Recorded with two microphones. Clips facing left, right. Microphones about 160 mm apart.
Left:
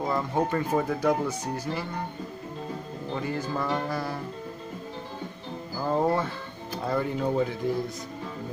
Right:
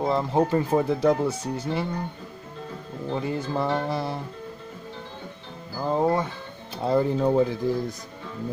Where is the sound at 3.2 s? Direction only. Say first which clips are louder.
Right 2 dB; 25° right (ahead or behind).